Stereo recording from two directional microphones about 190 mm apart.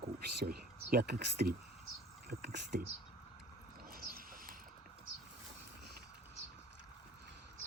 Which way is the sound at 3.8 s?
50° right (ahead or behind).